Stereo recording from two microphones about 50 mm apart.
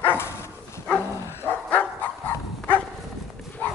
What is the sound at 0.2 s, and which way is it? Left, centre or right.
Dog, left.